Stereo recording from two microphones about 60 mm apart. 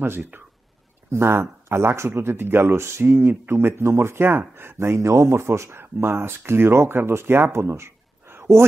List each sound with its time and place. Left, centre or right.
0.0 s speech: right